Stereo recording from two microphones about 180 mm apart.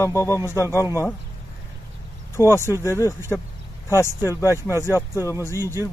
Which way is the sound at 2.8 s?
15° left (ahead or behind).